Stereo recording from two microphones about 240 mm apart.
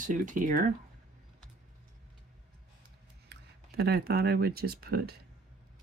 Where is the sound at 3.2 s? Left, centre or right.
Right.